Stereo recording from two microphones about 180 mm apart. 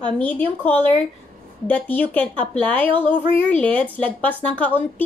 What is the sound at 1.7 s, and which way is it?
A woman's voice, 10° left (ahead or behind).